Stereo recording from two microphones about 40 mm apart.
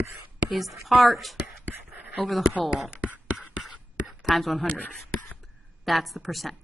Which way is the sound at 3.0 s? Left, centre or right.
Right.